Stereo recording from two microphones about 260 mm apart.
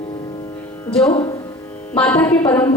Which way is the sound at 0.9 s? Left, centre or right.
Centre.